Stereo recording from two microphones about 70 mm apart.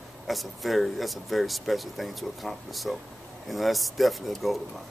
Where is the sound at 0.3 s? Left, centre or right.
Centre.